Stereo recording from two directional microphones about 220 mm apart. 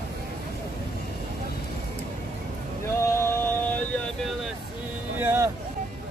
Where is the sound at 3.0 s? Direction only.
10° left (ahead or behind).